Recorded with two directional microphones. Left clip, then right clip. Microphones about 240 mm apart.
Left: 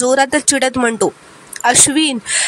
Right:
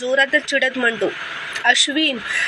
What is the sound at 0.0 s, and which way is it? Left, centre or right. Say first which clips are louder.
Speech: left 4 dB; left.